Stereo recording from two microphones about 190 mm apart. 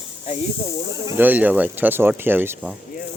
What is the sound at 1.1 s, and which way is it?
Speech, 10° right (ahead or behind).